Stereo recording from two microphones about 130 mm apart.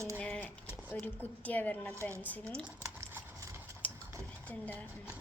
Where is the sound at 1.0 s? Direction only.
10° left (ahead or behind).